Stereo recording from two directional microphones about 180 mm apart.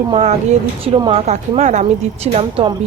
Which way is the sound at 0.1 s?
35° right (ahead or behind).